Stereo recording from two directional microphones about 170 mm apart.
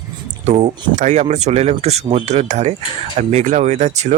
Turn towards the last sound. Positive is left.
turn(degrees=-40)  # may be behind; listen again after turning